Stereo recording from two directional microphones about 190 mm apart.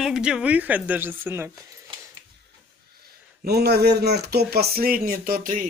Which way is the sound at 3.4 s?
60° right (ahead or behind).